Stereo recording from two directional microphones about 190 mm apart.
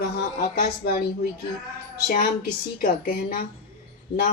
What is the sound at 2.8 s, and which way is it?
Speech, 50° left (ahead or behind).